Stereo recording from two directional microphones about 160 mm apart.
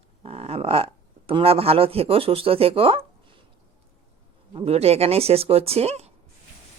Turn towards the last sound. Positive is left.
turn(degrees=-40)  # may be behind; listen again after turning